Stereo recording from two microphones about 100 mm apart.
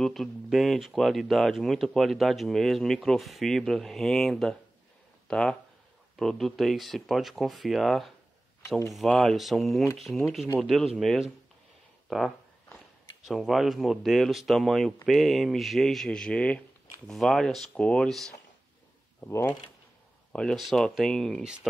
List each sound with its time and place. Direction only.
0.0 s speech: centre (ahead or behind)
19.2 s speech: 25° left (ahead or behind)
20.3 s speech: centre (ahead or behind)